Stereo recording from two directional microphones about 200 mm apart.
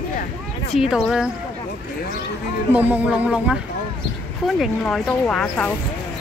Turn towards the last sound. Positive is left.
turn(degrees=5)  # may be behind; listen again after turning